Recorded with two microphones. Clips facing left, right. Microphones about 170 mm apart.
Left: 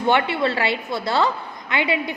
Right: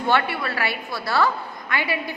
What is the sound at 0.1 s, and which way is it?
A woman's voice, 20° left (ahead or behind).